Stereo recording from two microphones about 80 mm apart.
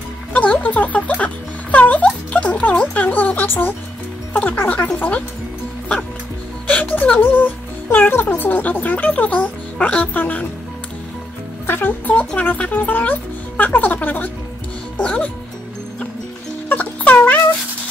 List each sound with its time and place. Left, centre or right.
0.3 s music: centre
4.3 s speech: left
6.7 s speech: centre
11.6 s speech: left
16.6 s music: left